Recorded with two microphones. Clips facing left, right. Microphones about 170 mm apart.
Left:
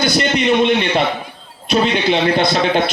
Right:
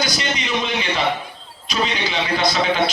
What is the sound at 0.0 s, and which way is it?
A man's voice, 60° left (ahead or behind).